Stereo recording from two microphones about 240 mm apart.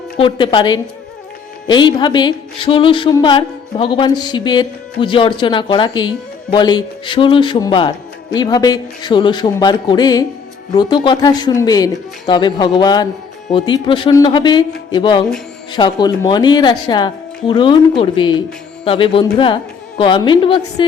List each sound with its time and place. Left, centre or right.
0.2 s music: left